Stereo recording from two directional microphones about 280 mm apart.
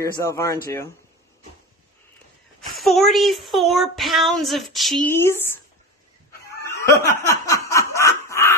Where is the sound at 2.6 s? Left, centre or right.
Centre.